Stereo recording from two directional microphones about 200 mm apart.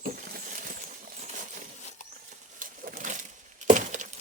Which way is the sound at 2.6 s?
40° right (ahead or behind).